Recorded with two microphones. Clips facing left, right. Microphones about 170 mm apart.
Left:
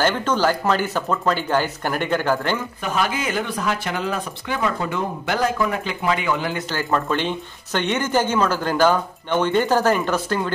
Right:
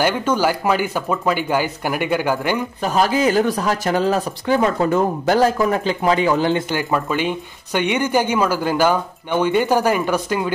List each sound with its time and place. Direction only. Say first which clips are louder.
0.0 s speech: right 2 dB; 10° right (ahead or behind)
2.8 s speech: right 10 dB; 35° right (ahead or behind)
6.7 s speech: right 2 dB; 10° right (ahead or behind)